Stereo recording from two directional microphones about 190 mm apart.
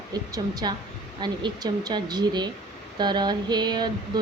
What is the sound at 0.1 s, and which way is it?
Speech, 20° right (ahead or behind).